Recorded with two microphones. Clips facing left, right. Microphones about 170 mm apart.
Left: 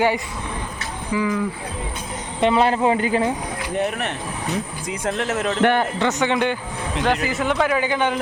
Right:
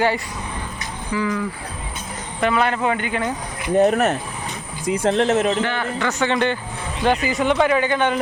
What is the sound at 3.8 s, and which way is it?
Speech, 45° right (ahead or behind).